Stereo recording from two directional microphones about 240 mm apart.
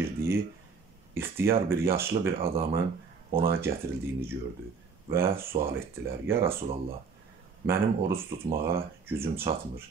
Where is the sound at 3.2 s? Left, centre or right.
Right.